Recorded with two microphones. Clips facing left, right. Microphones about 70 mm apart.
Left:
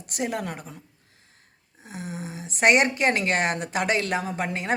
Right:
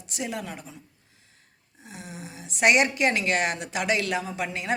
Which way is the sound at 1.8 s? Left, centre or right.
Left.